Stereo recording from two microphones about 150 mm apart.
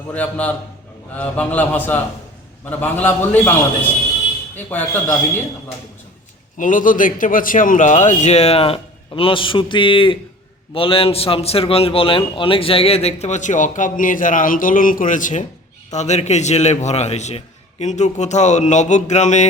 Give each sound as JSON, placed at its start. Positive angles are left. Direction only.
{"t": 0.1, "sound": "a man's voice", "side_deg": 10}
{"t": 4.7, "sound": "a man's voice", "side_deg": 10}
{"t": 6.6, "sound": "a man's voice", "side_deg": 60}